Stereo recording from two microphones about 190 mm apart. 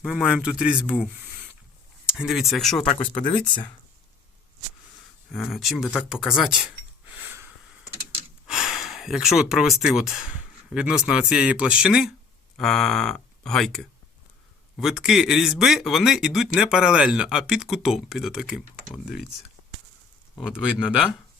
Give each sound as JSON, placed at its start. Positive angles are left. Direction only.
{"t": 0.0, "sound": "speech", "side_deg": -5}
{"t": 2.1, "sound": "speech", "side_deg": 0}
{"t": 2.9, "sound": "speech", "side_deg": 25}
{"t": 5.3, "sound": "speech", "side_deg": 0}
{"t": 20.4, "sound": "speech", "side_deg": -5}